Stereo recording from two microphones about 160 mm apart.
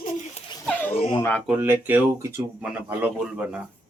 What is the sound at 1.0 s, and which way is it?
Speech, 35° left (ahead or behind).